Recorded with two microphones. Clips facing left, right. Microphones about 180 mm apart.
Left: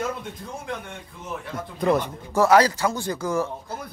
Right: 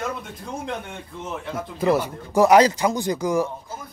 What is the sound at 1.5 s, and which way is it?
Speech, 5° right (ahead or behind).